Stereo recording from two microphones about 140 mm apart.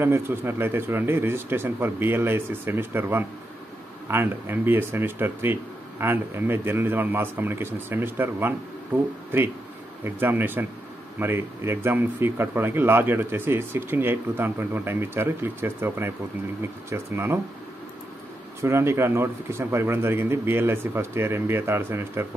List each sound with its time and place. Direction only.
0.0 s speech: 15° right (ahead or behind)
18.6 s speech: 20° right (ahead or behind)